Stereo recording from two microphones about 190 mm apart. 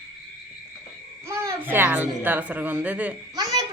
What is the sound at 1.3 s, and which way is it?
Speech, 15° right (ahead or behind).